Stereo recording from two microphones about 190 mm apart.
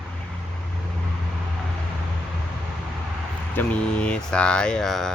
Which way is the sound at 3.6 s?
5° left (ahead or behind).